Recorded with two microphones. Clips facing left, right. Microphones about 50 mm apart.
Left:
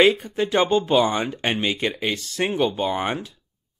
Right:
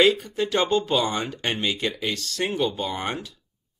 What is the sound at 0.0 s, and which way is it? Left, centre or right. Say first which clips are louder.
Speech: left 2 dB; left.